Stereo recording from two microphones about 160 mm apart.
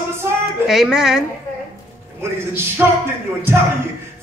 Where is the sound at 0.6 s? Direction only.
5° right (ahead or behind).